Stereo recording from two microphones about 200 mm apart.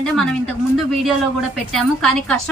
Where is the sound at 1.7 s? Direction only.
Centre (ahead or behind).